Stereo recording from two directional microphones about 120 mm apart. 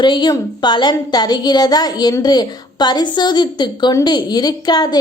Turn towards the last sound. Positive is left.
turn(degrees=35)  # may be behind; listen again after turning